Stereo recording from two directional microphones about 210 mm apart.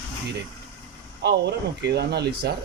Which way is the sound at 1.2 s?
50° right (ahead or behind).